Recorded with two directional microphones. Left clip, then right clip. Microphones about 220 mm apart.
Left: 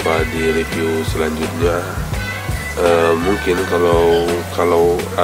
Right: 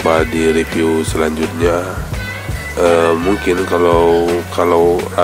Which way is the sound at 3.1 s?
Centre (ahead or behind).